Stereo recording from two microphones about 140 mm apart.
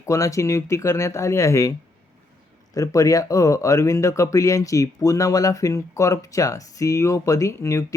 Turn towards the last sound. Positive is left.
turn(degrees=20)  # may be behind; listen again after turning